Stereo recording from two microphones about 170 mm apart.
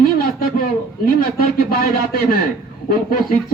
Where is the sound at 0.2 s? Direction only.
60° left (ahead or behind).